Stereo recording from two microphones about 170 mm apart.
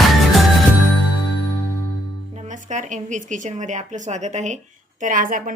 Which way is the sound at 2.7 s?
45° right (ahead or behind).